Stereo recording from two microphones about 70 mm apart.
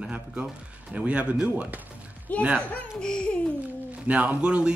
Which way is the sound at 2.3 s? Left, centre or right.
Left.